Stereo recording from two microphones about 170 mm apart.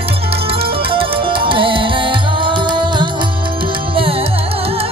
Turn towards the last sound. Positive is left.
turn(degrees=-35)  # may be behind; listen again after turning